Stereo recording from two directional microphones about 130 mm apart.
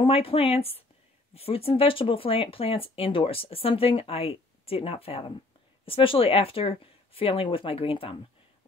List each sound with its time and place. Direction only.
0.0 s speech: 45° left (ahead or behind)